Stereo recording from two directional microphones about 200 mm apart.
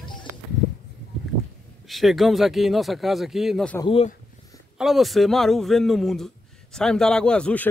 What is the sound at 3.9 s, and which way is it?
Speech, 30° left (ahead or behind).